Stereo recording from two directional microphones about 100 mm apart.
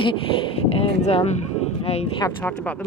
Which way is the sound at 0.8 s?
75° left (ahead or behind).